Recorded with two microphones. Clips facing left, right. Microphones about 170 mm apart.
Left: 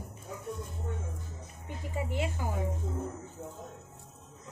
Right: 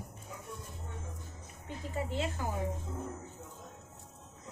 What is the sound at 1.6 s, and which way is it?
Speech, 10° left (ahead or behind).